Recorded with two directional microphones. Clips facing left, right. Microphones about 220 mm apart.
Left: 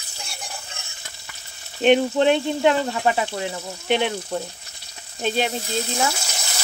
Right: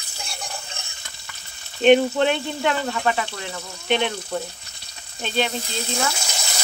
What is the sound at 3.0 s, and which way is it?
Speech, 15° left (ahead or behind).